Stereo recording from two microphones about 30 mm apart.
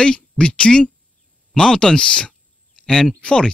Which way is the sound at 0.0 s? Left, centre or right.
Left.